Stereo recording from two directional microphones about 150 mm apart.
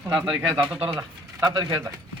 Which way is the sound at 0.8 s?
35° right (ahead or behind).